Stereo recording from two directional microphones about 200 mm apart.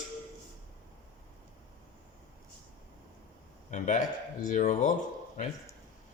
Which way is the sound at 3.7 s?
40° left (ahead or behind).